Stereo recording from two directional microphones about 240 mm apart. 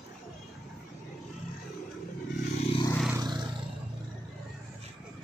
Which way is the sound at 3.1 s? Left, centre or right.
Centre.